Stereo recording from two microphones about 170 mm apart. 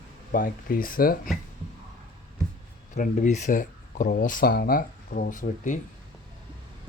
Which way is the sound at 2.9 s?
45° left (ahead or behind).